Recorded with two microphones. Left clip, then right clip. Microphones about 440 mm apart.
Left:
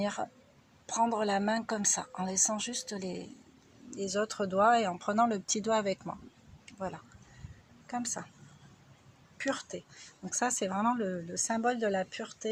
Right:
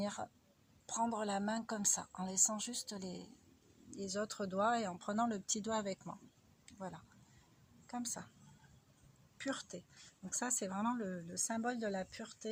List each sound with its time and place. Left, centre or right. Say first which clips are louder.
0.0 s speech: left 8 dB; left
6.7 s a sound: left 10 dB; left
7.9 s speech: left 8 dB; left
9.4 s speech: left 9 dB; left